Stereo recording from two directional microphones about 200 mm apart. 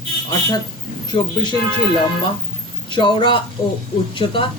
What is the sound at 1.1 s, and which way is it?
Speech, 20° left (ahead or behind).